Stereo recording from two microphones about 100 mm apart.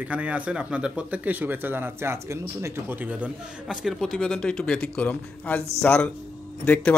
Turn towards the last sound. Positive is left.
turn(degrees=15)  # may be behind; listen again after turning